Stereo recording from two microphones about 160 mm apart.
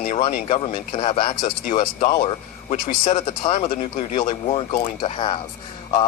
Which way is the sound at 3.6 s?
35° left (ahead or behind).